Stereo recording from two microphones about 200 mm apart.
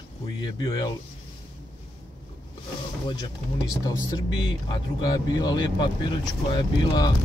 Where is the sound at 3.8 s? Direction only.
20° left (ahead or behind).